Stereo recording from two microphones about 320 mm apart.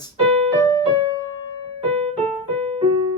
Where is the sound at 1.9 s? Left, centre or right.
Centre.